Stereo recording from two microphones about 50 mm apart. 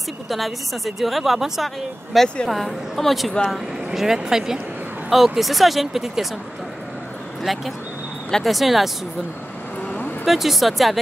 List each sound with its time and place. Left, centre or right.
0.3 s speech: centre
2.2 s speech: centre
2.5 s speech: centre
7.5 s speech: centre
10.2 s speech: centre